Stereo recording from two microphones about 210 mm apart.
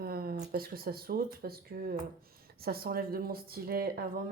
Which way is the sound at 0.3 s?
45° right (ahead or behind).